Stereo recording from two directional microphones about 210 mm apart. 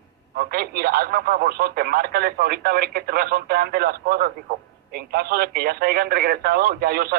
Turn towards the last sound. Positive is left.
turn(degrees=-45)  # may be behind; listen again after turning